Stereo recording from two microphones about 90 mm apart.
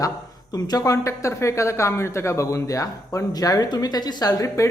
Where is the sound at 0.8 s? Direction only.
35° left (ahead or behind).